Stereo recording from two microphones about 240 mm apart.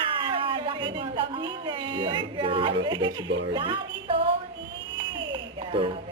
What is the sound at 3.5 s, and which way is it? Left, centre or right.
Speech, right.